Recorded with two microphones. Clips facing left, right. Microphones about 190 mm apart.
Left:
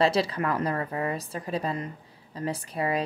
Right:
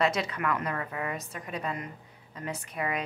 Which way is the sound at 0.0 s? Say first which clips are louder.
Left 4 dB; 30° left (ahead or behind).